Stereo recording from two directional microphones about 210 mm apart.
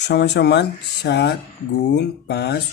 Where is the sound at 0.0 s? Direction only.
55° left (ahead or behind).